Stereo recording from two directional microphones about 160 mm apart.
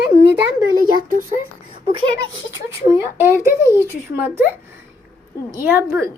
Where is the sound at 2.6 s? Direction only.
15° right (ahead or behind).